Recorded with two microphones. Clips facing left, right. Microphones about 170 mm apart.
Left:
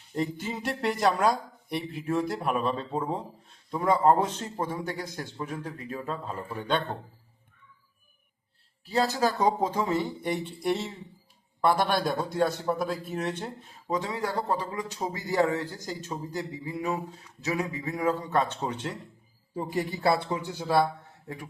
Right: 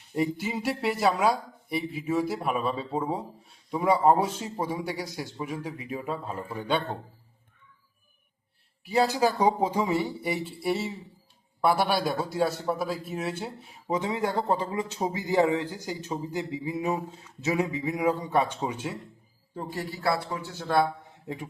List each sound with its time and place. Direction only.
0.1 s speech: 10° right (ahead or behind)
8.8 s speech: 15° right (ahead or behind)
19.5 s speech: 15° left (ahead or behind)